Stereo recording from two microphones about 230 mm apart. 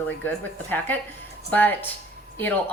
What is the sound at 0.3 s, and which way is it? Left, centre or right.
A woman's voice, centre.